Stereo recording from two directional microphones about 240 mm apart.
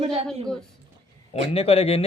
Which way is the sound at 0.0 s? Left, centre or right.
Right.